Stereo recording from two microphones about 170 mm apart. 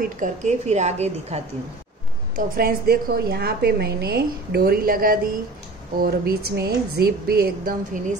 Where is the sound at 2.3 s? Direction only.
60° right (ahead or behind).